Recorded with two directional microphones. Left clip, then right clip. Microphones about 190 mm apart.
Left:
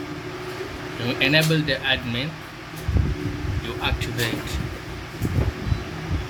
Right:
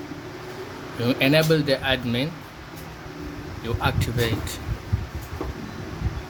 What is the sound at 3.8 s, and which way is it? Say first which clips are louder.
Speech: right 1 dB; 60° right (ahead or behind).